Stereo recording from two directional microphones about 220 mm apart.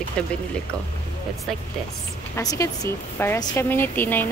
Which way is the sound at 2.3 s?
15° left (ahead or behind).